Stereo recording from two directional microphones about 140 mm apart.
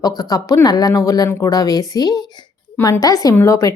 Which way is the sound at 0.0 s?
25° left (ahead or behind).